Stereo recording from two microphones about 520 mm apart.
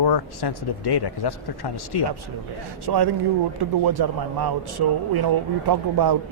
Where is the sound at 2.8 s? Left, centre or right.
Right.